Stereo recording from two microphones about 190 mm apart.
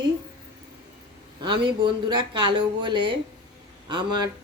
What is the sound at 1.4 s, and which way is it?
Speech, 25° right (ahead or behind).